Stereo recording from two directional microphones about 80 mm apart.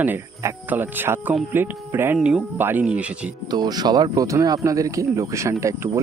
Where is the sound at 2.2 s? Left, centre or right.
Centre.